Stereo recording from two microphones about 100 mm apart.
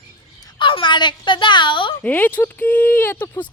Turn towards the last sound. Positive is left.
turn(degrees=20)  # may be behind; listen again after turning